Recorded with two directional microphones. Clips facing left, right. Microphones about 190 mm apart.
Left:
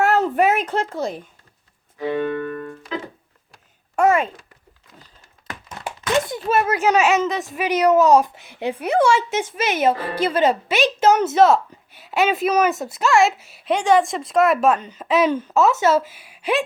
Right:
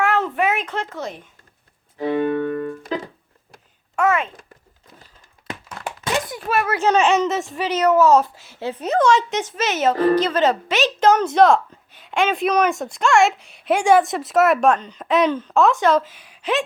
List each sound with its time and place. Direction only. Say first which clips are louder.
0.0 s a sound: left 3 dB; 40° left (ahead or behind)
2.3 s keyboard: right 4 dB; 30° right (ahead or behind)
2.9 s music: right 1 dB; 35° right (ahead or behind)
3.9 s a child's voice: left 3 dB; 40° left (ahead or behind)
6.2 s a child's voice: left 2 dB; 25° left (ahead or behind); by 7.4 s centre (ahead or behind)
7.5 s a child's voice: left 2 dB; 15° left (ahead or behind)
13.7 s speech: right 1 dB; 10° right (ahead or behind); by 16.6 s 10° left (ahead or behind)